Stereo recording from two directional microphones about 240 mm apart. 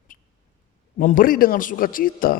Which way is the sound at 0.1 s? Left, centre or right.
Left.